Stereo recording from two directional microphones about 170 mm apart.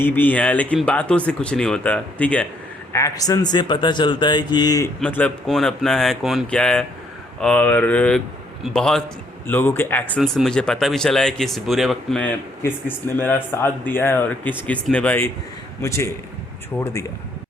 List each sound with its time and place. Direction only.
0.0 s speech: 10° left (ahead or behind)
2.9 s speech: 20° left (ahead or behind)
4.9 s speech: 5° left (ahead or behind)
13.1 s speech: 10° left (ahead or behind)